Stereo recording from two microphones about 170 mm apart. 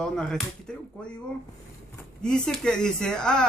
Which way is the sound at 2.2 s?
5° left (ahead or behind).